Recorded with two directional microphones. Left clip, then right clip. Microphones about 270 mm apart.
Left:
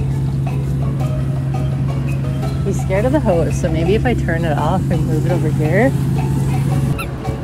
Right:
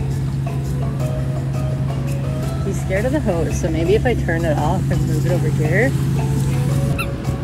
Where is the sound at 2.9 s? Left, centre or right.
Left.